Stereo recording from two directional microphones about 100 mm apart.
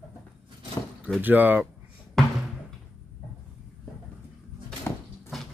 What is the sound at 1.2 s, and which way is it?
Speech, 20° right (ahead or behind).